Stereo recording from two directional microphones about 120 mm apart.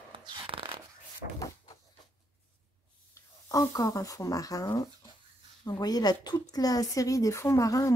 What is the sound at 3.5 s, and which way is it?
A woman's voice, 30° left (ahead or behind).